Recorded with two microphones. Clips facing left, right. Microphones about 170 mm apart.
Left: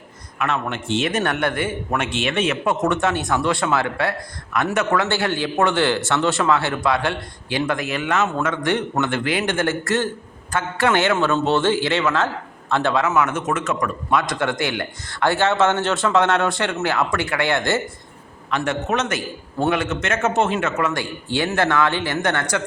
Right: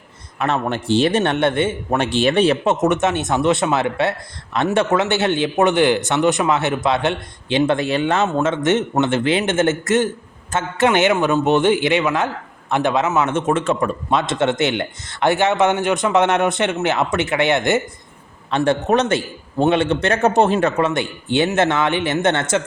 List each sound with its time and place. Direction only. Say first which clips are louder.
0.3 s a man's voice: right 3 dB; 35° right (ahead or behind)
2.8 s a man's voice: right 3 dB; 20° right (ahead or behind)
18.5 s a man's voice: right 6 dB; 30° right (ahead or behind)